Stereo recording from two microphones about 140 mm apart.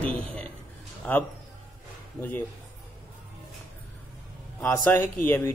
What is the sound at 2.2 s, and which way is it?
Speech, 15° left (ahead or behind).